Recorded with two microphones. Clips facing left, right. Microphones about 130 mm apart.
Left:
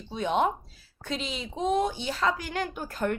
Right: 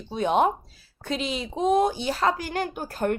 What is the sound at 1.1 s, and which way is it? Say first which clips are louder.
Speech: right 5 dB; 65° right (ahead or behind).